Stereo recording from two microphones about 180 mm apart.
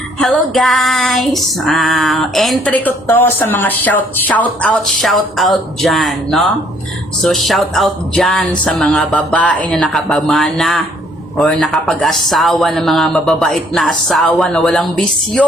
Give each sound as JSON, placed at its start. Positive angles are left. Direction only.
{"t": 0.2, "sound": "female singing", "side_deg": 0}